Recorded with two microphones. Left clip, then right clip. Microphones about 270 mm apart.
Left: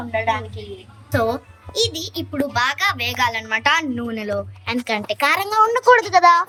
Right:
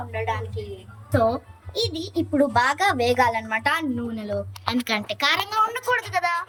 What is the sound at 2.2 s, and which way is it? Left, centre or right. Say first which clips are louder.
A woman's voice: right 1 dB; centre.